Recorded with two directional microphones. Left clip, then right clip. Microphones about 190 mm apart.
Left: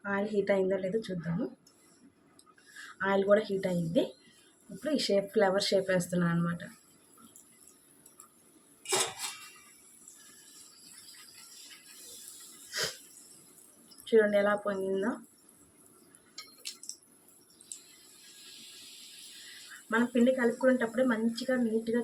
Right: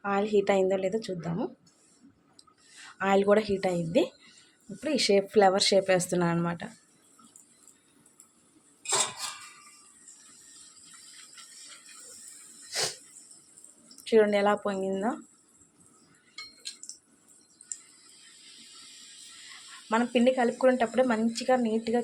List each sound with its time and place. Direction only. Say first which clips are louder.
0.0 s a woman's voice: right 5 dB; 45° right (ahead or behind)
3.0 s speech: right 3 dB; 40° right (ahead or behind)
14.0 s speech: right 2 dB; 40° right (ahead or behind)
19.9 s speech: right 3 dB; 40° right (ahead or behind)